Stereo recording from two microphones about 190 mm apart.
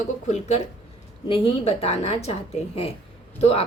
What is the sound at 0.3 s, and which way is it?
Speech, 35° left (ahead or behind).